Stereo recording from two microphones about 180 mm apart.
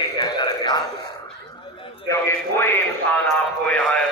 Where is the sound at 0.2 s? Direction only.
25° left (ahead or behind).